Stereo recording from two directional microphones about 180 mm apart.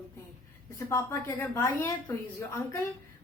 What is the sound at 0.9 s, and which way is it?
A woman's voice, 10° left (ahead or behind).